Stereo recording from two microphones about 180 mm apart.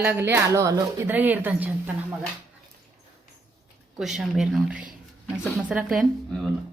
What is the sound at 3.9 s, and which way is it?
A woman's voice, centre (ahead or behind).